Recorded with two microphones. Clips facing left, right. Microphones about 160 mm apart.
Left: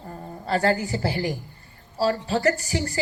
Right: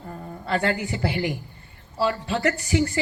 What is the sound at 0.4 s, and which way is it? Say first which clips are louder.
A woman's voice: left 2 dB; 35° left (ahead or behind).